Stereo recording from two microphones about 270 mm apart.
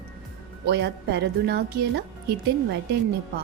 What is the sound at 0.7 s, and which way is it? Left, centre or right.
A woman's voice, right.